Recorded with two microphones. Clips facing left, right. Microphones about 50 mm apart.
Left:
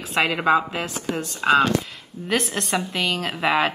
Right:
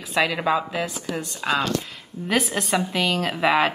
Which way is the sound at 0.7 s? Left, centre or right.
Left.